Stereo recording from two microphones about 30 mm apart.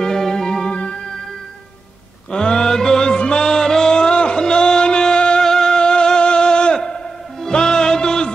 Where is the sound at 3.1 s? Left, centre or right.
Left.